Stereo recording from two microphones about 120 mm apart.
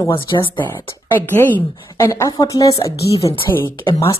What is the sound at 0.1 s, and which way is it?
Speech, 40° left (ahead or behind).